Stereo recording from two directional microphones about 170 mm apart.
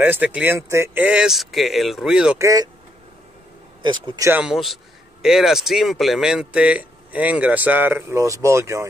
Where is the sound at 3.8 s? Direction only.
25° right (ahead or behind).